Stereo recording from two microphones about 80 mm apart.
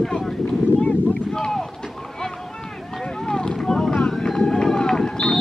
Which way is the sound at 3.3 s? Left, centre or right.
Centre.